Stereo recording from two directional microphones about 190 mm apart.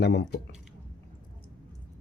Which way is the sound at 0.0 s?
65° left (ahead or behind).